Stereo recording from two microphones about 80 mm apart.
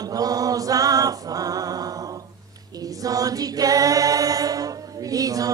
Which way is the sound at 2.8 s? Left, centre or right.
Right.